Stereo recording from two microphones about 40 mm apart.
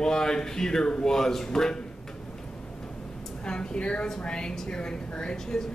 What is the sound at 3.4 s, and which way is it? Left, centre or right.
A woman's voice, left.